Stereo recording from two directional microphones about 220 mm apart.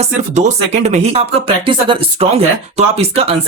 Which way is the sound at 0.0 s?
30° right (ahead or behind).